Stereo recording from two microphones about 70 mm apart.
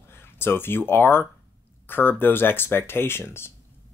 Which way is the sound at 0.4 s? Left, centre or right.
Left.